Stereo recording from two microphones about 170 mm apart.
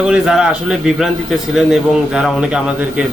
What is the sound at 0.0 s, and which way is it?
A man's voice, 5° right (ahead or behind).